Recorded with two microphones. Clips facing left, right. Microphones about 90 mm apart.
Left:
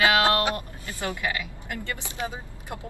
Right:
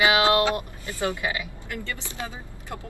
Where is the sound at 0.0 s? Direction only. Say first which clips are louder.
Right 1 dB; 15° right (ahead or behind).